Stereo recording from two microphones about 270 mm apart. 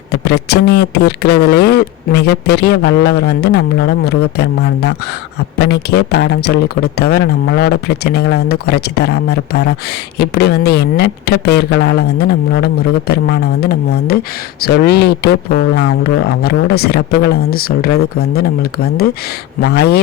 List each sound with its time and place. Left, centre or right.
0.1 s speech: left